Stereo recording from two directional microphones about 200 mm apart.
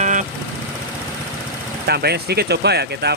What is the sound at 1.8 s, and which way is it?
Speech, 55° right (ahead or behind).